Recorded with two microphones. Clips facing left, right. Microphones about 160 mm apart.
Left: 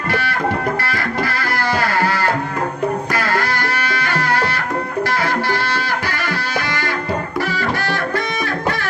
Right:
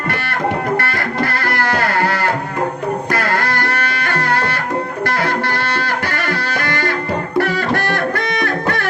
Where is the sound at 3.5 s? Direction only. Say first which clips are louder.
Right 1 dB; 55° right (ahead or behind).